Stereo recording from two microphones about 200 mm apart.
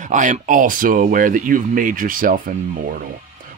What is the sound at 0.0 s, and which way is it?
Speech, 40° right (ahead or behind).